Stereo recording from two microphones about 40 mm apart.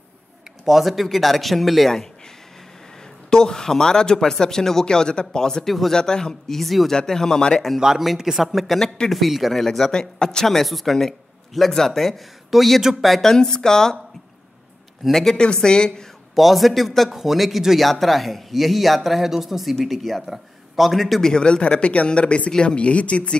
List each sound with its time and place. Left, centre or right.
0.7 s speech: centre
3.3 s speech: centre
5.7 s speech: centre
5.9 s speech: centre
6.5 s speech: centre
6.9 s speech: centre
7.8 s speech: centre
9.7 s speech: centre
10.4 s speech: centre
13.3 s speech: centre
15.0 s speech: centre
15.3 s speech: left
16.3 s speech: centre
21.2 s speech: centre